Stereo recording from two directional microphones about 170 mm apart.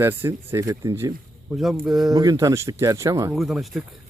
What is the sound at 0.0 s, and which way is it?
Speech, 15° right (ahead or behind).